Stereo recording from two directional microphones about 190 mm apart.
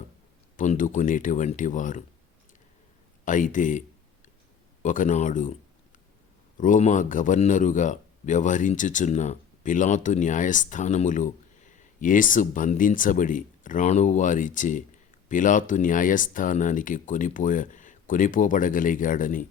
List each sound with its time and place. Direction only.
0.5 s speech: 40° left (ahead or behind)
3.2 s speech: 45° left (ahead or behind)
6.6 s speech: 40° left (ahead or behind)